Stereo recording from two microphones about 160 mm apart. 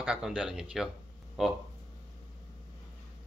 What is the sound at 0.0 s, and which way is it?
A man's voice, 5° right (ahead or behind).